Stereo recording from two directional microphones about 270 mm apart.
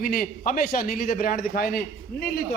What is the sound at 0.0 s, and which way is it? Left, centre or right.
A man's voice, left.